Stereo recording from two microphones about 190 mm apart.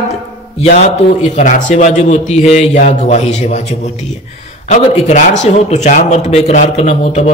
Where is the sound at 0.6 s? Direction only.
35° left (ahead or behind).